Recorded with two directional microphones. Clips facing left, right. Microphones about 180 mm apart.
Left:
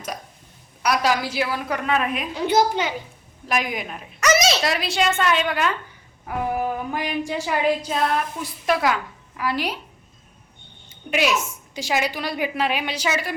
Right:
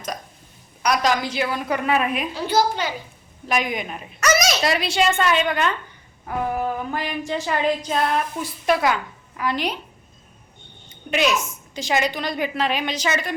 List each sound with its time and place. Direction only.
0.8 s a woman's voice: 5° left (ahead or behind)
2.3 s a woman's voice: 20° left (ahead or behind)
3.4 s a woman's voice: centre (ahead or behind)
4.2 s a sound: 25° left (ahead or behind)
4.6 s a woman's voice: centre (ahead or behind)
6.2 s music: 10° left (ahead or behind)
9.4 s a woman's voice: 5° left (ahead or behind)
10.8 s a woman's voice: 5° left (ahead or behind)